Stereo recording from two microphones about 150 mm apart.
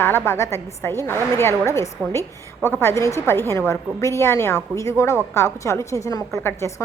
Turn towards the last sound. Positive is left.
turn(degrees=20)  # may be behind; listen again after turning